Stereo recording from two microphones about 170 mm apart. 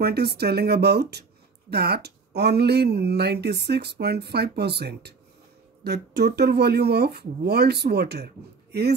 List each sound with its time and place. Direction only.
0.0 s speech: 70° right (ahead or behind)